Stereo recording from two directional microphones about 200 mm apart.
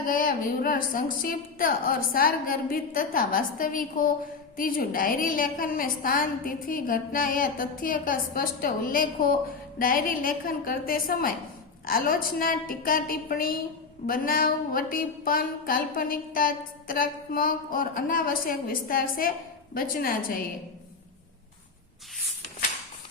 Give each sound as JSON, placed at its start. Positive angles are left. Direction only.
{"t": 0.0, "sound": "a woman's voice", "side_deg": 45}